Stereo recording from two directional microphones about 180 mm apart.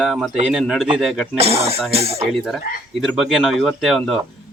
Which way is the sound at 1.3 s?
35° right (ahead or behind).